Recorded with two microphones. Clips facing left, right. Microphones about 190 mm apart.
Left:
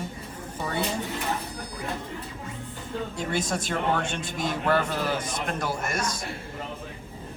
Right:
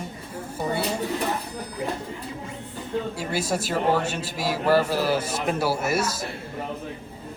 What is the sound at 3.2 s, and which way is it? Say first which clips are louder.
A man's voice: right 2 dB; 5° right (ahead or behind).